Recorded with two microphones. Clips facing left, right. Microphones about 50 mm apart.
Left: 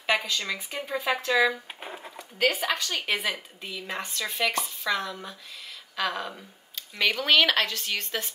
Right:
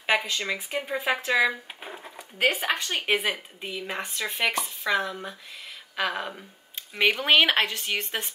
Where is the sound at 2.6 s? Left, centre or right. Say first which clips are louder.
Right 1 dB; right.